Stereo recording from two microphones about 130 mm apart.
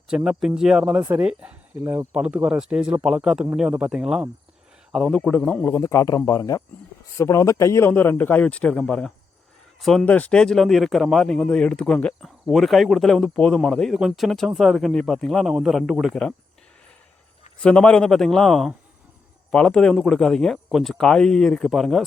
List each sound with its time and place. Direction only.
0.3 s speech: 5° right (ahead or behind)
5.6 s a man's voice: 20° left (ahead or behind); by 16.2 s centre (ahead or behind)
17.6 s speech: 10° left (ahead or behind)